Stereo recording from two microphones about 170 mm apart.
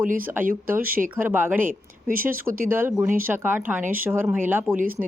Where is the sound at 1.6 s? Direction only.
55° right (ahead or behind).